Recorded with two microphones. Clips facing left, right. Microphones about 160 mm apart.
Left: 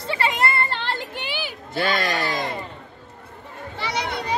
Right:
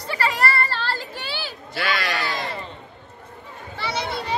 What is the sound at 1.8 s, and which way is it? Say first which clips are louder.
Speech: left 3 dB; 45° left (ahead or behind).